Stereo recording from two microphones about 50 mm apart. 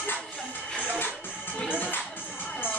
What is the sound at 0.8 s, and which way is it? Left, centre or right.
Music, left.